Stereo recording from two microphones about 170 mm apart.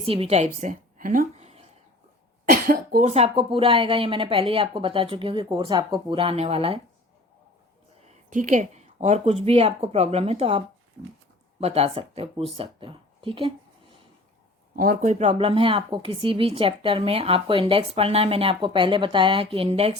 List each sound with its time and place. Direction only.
0.0 s a woman's voice: 35° right (ahead or behind)
2.5 s speech: 55° right (ahead or behind)
3.1 s speech: 40° right (ahead or behind)
8.0 s speech: 45° right (ahead or behind)
11.6 s speech: 35° right (ahead or behind)
14.8 s speech: 50° right (ahead or behind); by 19.9 s 35° right (ahead or behind)